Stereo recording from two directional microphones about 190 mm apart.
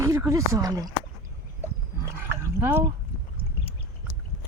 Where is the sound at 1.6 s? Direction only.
15° right (ahead or behind).